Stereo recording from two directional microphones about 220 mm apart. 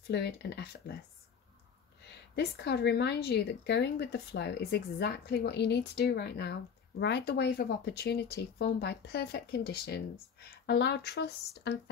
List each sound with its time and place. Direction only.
0.0 s speech: 50° left (ahead or behind)
2.3 s speech: 50° left (ahead or behind)